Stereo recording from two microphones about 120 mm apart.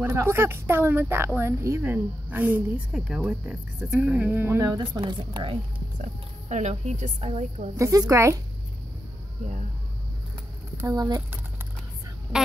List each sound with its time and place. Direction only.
0.0 s speech: 25° right (ahead or behind)
4.6 s a woman's voice: 35° right (ahead or behind)
6.5 s a woman's voice: 75° right (ahead or behind)
7.7 s speech: 25° right (ahead or behind)
10.8 s speech: 25° right (ahead or behind)